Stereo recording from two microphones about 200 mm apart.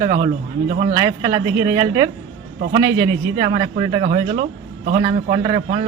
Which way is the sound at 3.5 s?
30° right (ahead or behind).